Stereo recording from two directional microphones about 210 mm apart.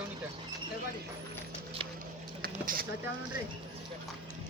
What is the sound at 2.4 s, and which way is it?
Vehicle, 45° right (ahead or behind).